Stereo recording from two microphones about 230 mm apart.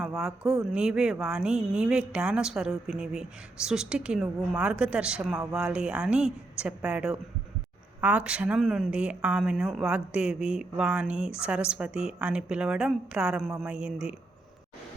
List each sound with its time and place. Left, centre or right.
0.0 s speech: centre